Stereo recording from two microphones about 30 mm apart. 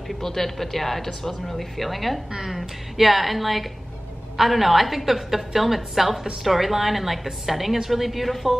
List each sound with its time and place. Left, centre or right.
0.2 s a woman's voice: centre
2.3 s a woman's voice: centre